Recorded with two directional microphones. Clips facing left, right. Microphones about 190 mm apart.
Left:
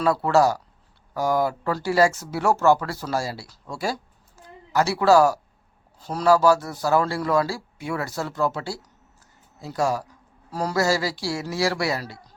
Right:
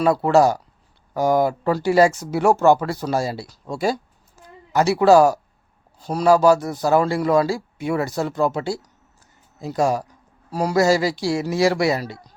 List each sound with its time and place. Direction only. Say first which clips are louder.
0.0 s a man's voice: right 3 dB; 20° right (ahead or behind)